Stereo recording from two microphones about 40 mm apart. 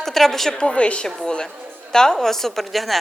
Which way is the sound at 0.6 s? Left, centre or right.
Left.